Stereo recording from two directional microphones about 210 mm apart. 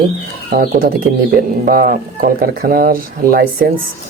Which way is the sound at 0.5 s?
45° right (ahead or behind).